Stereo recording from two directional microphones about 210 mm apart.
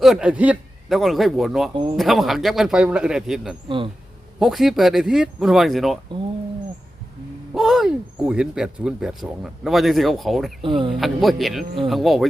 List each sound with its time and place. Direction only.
0.0 s speech: 5° right (ahead or behind)
1.7 s speech: 20° right (ahead or behind)
2.0 s speech: centre (ahead or behind)
7.5 s speech: centre (ahead or behind)
10.6 s speech: 25° right (ahead or behind)
10.9 s speech: centre (ahead or behind)